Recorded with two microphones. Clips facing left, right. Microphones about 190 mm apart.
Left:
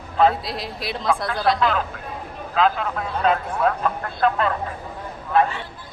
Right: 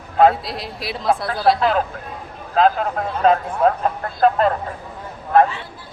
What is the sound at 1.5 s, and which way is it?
Speech, 40° right (ahead or behind).